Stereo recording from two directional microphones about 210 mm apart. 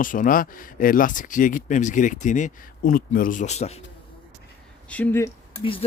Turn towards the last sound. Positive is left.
turn(degrees=25)  # may be behind; listen again after turning